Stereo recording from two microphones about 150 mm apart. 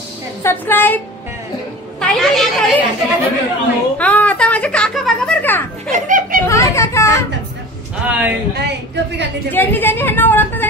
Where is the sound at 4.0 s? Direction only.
10° left (ahead or behind).